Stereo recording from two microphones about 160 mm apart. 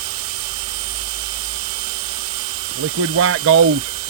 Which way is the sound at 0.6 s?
35° right (ahead or behind).